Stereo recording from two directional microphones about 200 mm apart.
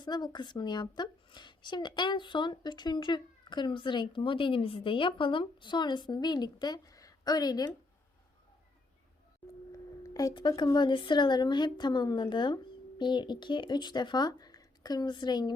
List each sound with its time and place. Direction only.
0.0 s a woman's voice: 20° left (ahead or behind)
10.0 s a woman's voice: 15° left (ahead or behind)